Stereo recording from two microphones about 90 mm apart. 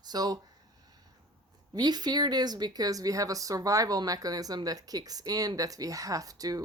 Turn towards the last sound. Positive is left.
turn(degrees=-40)  # may be behind; listen again after turning